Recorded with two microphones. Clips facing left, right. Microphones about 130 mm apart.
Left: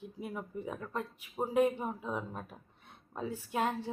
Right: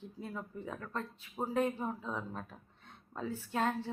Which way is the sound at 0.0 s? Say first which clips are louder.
Left 2 dB; 15° left (ahead or behind).